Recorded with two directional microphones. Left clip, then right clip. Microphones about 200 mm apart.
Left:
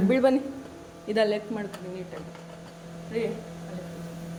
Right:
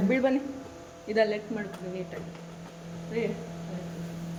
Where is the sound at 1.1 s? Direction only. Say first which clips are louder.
Left 1 dB; 25° left (ahead or behind).